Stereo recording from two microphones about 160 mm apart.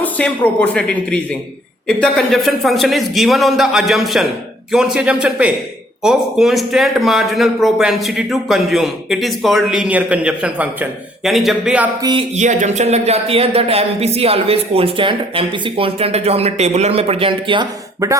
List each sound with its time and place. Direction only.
0.0 s a man's voice: 10° left (ahead or behind)
12.4 s speech: 50° right (ahead or behind); by 17.7 s 30° right (ahead or behind)